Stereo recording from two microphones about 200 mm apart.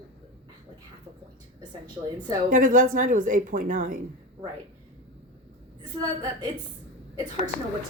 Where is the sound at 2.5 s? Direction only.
40° right (ahead or behind).